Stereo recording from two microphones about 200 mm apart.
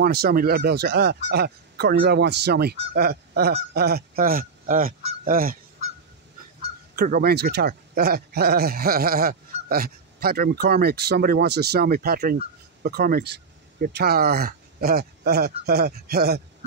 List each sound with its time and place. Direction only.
0.0 s speech: 50° right (ahead or behind)
7.0 s speech: 50° right (ahead or behind)